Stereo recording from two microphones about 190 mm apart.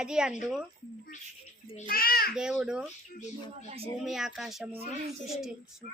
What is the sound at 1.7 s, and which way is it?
Speech, 50° left (ahead or behind).